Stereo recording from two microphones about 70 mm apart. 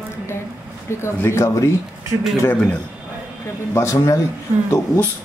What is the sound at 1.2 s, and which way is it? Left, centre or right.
Speech, left.